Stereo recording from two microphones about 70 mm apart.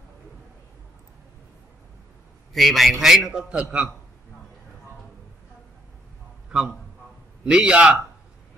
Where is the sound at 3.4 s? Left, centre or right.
Centre.